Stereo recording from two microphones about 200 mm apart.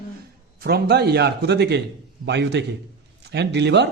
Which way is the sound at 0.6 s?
55° right (ahead or behind).